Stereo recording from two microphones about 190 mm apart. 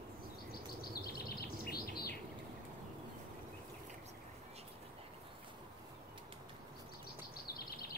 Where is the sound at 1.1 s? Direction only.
55° left (ahead or behind).